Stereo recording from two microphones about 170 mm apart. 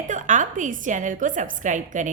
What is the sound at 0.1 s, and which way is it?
A woman's voice, 45° right (ahead or behind).